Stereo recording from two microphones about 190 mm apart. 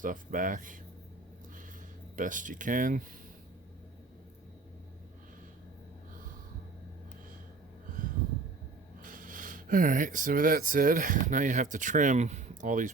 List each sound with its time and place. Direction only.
0.0 s speech: 45° right (ahead or behind)
2.1 s speech: 45° right (ahead or behind)
9.0 s speech: 45° right (ahead or behind)